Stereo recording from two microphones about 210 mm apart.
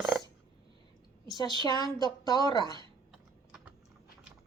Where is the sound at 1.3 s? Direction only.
20° left (ahead or behind).